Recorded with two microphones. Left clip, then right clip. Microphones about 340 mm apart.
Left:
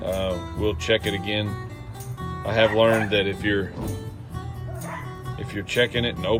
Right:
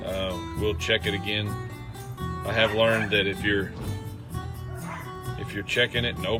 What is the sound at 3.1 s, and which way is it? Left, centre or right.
Speech, centre.